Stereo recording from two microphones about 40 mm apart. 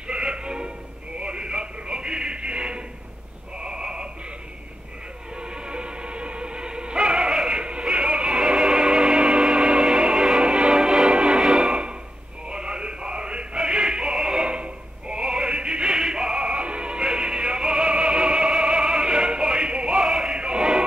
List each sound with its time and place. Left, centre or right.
0.0 s a sound: right
5.3 s music: right
11.5 s a sound: right
12.4 s music: right
14.1 s synthetic singing: centre
16.0 s music: centre
18.6 s opera: right
20.0 s male singing: centre
20.3 s choir: right